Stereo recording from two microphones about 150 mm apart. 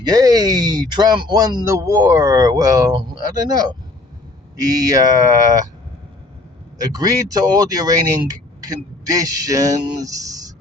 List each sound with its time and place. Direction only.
0.0 s speech: 25° right (ahead or behind)
6.7 s speech: 25° right (ahead or behind)